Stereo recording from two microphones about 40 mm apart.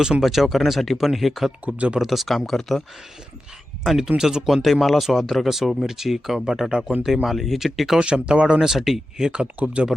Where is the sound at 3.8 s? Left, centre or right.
Centre.